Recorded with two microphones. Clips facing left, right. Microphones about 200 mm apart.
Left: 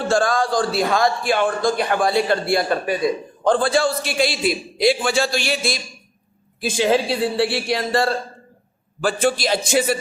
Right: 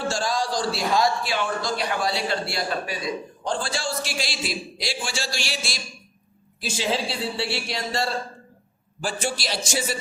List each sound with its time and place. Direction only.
0.1 s a man's voice: 55° left (ahead or behind)